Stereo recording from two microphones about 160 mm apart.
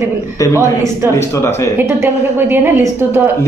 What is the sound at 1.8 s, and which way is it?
A woman's voice, 15° right (ahead or behind).